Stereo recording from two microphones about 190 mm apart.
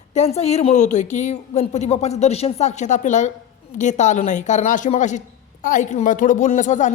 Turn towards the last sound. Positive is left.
turn(degrees=40)  # may be behind; listen again after turning